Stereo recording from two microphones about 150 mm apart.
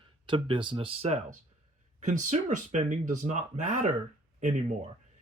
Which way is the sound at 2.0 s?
55° right (ahead or behind).